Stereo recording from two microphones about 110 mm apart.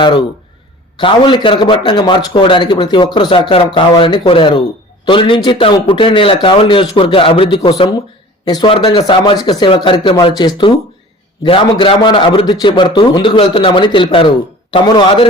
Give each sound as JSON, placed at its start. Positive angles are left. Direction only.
{"t": 0.0, "sound": "a man's voice", "side_deg": 45}
{"t": 8.4, "sound": "speech", "side_deg": 40}
{"t": 8.7, "sound": "a man's voice", "side_deg": 55}
{"t": 11.4, "sound": "a man's voice", "side_deg": 55}